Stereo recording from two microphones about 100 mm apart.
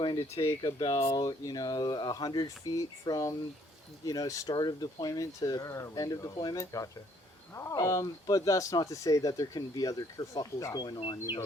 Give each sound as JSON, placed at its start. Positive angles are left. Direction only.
{"t": 0.4, "sound": "speech", "side_deg": 50}
{"t": 1.0, "sound": "speech", "side_deg": 40}